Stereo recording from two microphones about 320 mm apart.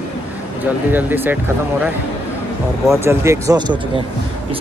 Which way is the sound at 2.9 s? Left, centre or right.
Centre.